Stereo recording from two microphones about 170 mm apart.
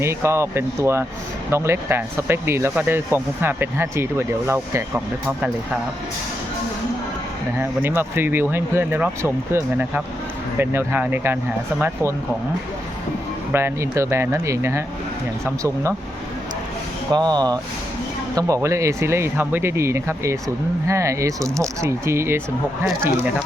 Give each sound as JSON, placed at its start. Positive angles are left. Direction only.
{"t": 0.0, "sound": "speech", "side_deg": -15}
{"t": 7.6, "sound": "speech", "side_deg": -10}
{"t": 13.5, "sound": "speech", "side_deg": -15}
{"t": 17.1, "sound": "speech", "side_deg": -25}